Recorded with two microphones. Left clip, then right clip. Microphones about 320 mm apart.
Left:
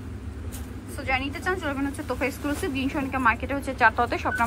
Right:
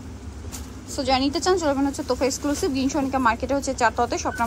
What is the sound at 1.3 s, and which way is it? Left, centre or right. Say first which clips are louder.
A woman's voice: right 7 dB; centre.